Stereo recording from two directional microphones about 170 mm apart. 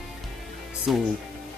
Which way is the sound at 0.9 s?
Centre (ahead or behind).